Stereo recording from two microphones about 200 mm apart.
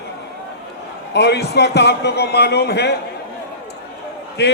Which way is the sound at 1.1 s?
55° left (ahead or behind).